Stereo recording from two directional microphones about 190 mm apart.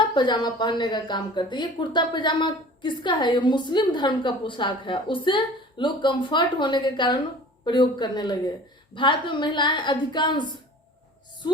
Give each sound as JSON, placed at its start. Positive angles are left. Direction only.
{"t": 0.1, "sound": "a woman's voice", "side_deg": 25}